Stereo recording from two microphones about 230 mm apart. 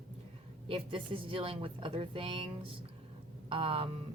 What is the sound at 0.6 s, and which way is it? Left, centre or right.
Speech, right.